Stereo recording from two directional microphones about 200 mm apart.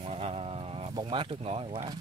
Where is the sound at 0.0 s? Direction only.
30° right (ahead or behind).